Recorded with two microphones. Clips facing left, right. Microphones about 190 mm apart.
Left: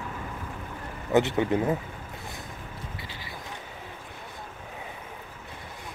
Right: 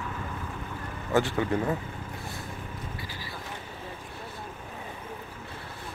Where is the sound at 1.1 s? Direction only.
20° left (ahead or behind).